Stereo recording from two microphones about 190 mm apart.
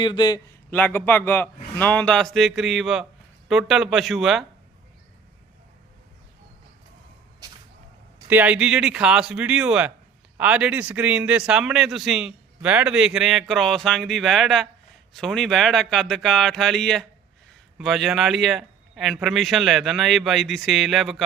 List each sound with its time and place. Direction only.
0.0 s a man's voice: 20° left (ahead or behind)
0.7 s a man's voice: 10° left (ahead or behind)
8.3 s a man's voice: 10° right (ahead or behind)